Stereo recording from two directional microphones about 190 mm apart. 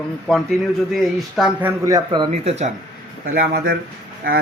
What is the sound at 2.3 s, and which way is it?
Speech, 35° right (ahead or behind).